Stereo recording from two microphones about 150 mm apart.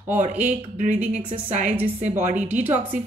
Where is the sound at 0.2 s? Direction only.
55° right (ahead or behind).